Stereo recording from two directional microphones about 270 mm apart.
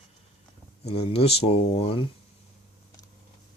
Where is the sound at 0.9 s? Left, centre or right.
Left.